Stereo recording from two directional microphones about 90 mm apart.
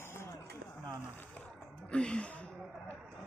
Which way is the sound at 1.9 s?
10° left (ahead or behind).